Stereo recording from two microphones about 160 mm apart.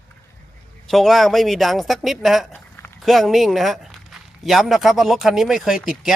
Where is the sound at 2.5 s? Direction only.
10° left (ahead or behind).